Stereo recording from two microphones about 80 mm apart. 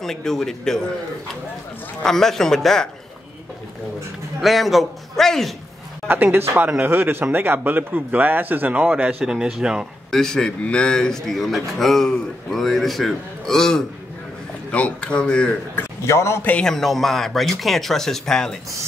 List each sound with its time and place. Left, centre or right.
0.0 s speech: centre
2.0 s speech: centre
4.4 s speech: centre
6.0 s speech: right; by 9.8 s centre
10.1 s speech: centre
15.7 s a man's voice: left
16.4 s speech: centre